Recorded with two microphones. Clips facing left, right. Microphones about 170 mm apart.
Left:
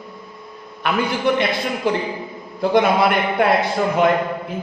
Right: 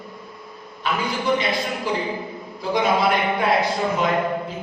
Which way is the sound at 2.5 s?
60° left (ahead or behind).